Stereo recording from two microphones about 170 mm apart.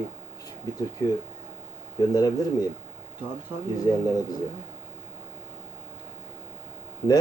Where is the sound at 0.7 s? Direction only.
20° left (ahead or behind).